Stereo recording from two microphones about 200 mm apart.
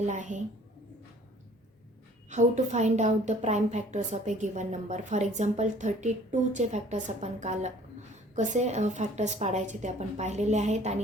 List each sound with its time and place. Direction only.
0.0 s a woman's voice: 35° right (ahead or behind)
2.3 s a woman's voice: 35° right (ahead or behind)